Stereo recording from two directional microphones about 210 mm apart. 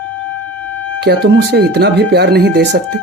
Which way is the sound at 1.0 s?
55° right (ahead or behind).